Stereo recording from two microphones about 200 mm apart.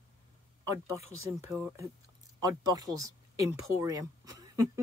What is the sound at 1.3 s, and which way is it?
Speech, 15° right (ahead or behind).